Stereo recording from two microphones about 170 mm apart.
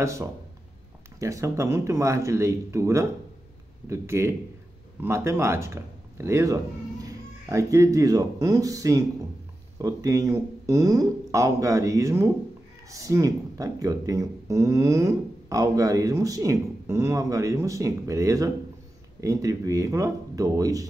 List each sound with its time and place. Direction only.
0.0 s speech: 15° right (ahead or behind)